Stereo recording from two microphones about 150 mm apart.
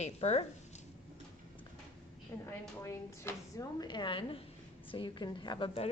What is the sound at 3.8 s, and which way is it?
A woman's voice, 30° left (ahead or behind).